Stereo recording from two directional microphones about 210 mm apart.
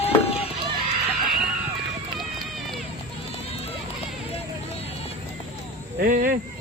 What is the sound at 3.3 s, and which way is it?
Music, 30° left (ahead or behind).